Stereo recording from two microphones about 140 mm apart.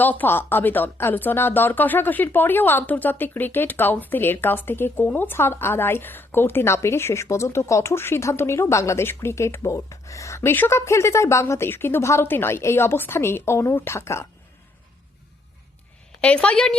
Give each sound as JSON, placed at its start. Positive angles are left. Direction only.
{"t": 0.0, "sound": "speech", "side_deg": 10}
{"t": 16.2, "sound": "speech", "side_deg": 10}